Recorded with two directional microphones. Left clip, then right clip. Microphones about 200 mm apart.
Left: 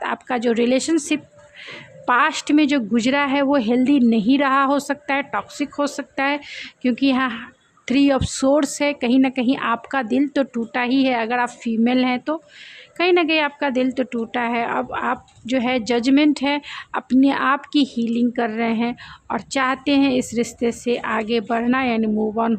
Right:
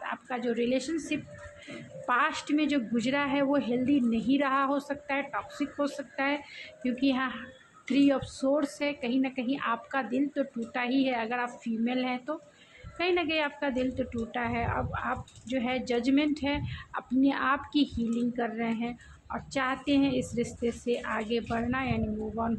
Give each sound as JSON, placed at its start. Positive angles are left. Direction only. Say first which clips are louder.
{"t": 0.0, "sound": "a woman's voice", "louder": "left 11 dB", "side_deg": 50}